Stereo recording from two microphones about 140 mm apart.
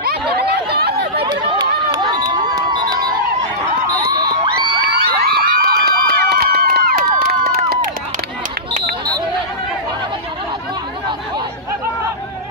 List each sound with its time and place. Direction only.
1.2 s crowd: 30° right (ahead or behind)
5.0 s crowd: 90° right
7.4 s run: 90° right